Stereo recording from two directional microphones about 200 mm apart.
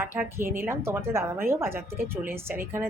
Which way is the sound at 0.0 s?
10° right (ahead or behind).